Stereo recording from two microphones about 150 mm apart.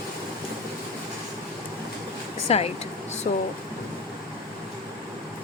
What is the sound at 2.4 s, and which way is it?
Speech, 40° left (ahead or behind).